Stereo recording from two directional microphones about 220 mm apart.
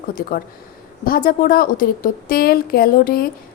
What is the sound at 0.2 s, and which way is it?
A woman's voice, 40° left (ahead or behind).